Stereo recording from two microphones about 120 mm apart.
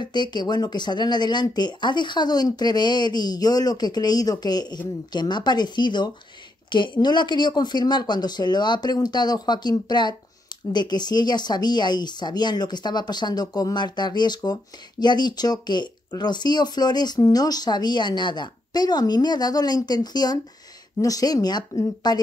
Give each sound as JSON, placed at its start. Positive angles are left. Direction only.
{"t": 0.0, "sound": "speech", "side_deg": 40}